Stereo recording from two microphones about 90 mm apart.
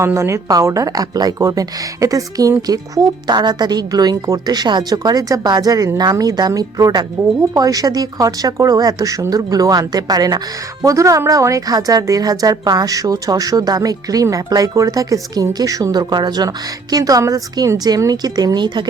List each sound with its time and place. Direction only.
0.0 s a woman's voice: 30° right (ahead or behind); by 18.9 s 55° right (ahead or behind)